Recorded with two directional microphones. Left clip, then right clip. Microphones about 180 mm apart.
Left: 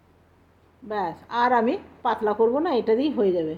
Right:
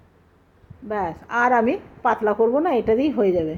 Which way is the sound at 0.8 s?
20° right (ahead or behind).